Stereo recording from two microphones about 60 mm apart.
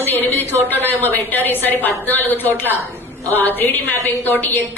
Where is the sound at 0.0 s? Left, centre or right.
Left.